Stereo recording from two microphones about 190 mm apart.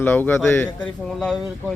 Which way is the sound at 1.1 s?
Centre (ahead or behind).